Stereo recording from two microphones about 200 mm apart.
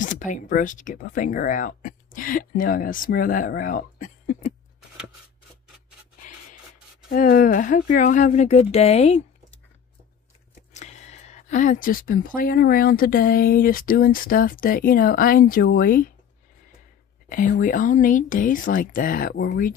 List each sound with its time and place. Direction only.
0.0 s speech: 40° left (ahead or behind)
7.1 s speech: 45° left (ahead or behind)
10.7 s speech: 35° left (ahead or behind)
17.3 s speech: 40° left (ahead or behind)